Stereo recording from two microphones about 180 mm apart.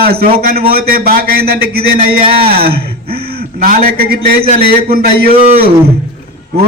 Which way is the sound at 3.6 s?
55° right (ahead or behind).